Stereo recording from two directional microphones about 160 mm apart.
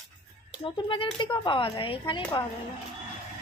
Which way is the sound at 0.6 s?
30° left (ahead or behind).